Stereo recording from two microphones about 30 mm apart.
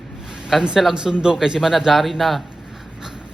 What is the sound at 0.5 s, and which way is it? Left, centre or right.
A man's voice, centre.